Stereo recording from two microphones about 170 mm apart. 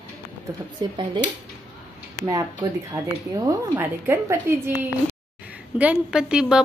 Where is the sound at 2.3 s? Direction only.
20° right (ahead or behind); by 6.6 s 5° right (ahead or behind).